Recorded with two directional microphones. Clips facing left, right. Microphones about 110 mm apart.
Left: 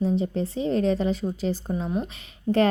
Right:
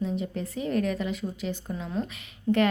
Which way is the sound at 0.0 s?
30° left (ahead or behind).